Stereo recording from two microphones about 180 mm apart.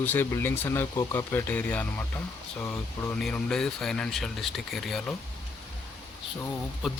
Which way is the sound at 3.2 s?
5° left (ahead or behind).